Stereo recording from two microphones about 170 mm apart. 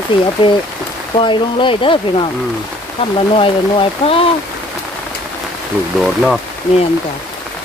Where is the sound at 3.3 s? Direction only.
35° left (ahead or behind).